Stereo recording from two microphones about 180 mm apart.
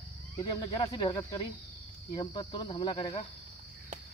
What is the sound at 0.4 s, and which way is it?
Speech, 25° left (ahead or behind).